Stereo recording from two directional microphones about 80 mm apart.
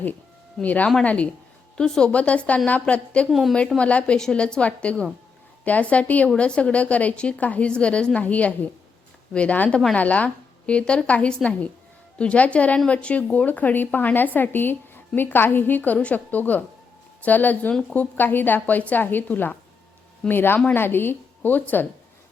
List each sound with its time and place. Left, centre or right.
0.6 s a woman's voice: centre
3.2 s a woman's voice: centre
3.8 s a woman's voice: centre